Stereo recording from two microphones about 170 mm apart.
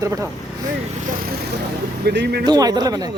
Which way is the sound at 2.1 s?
75° right (ahead or behind).